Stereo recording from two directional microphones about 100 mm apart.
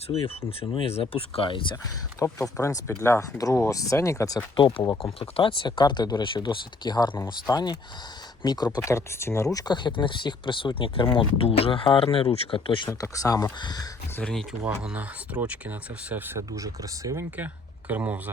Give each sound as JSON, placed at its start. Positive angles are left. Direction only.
{"t": 0.8, "sound": "speech", "side_deg": 85}
{"t": 1.7, "sound": "speech", "side_deg": 30}
{"t": 5.2, "sound": "speech", "side_deg": 60}
{"t": 8.9, "sound": "speech", "side_deg": 25}
{"t": 12.9, "sound": "speech", "side_deg": 35}
{"t": 13.6, "sound": "speech", "side_deg": 45}
{"t": 14.2, "sound": "speech", "side_deg": 10}
{"t": 14.6, "sound": "speech", "side_deg": -10}
{"t": 16.5, "sound": "speech", "side_deg": -35}
{"t": 17.3, "sound": "speech", "side_deg": -15}